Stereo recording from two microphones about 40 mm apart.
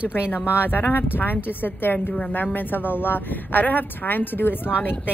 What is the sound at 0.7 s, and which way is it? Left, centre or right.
A woman's voice, left.